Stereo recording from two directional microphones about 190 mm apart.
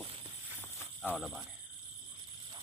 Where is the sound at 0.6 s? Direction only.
10° left (ahead or behind).